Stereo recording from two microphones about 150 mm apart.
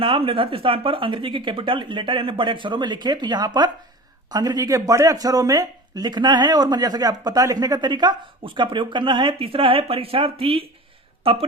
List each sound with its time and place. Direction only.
0.0 s speech: 35° right (ahead or behind)